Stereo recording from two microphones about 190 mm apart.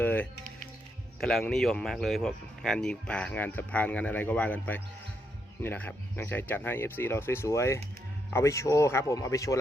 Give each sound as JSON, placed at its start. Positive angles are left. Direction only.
{"t": 0.0, "sound": "music", "side_deg": 10}
{"t": 1.2, "sound": "speech", "side_deg": 0}